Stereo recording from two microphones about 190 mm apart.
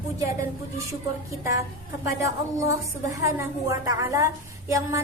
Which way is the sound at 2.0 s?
15° right (ahead or behind).